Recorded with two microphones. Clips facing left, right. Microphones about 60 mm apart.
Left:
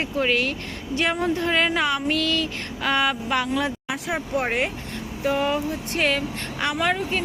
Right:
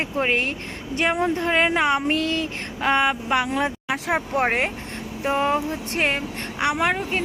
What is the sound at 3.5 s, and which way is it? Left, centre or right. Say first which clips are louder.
Speech: right 1 dB; right.